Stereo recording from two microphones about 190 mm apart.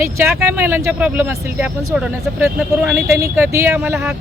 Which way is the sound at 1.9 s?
Centre (ahead or behind).